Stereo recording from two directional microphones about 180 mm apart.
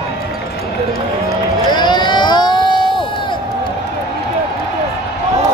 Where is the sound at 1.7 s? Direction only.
25° left (ahead or behind).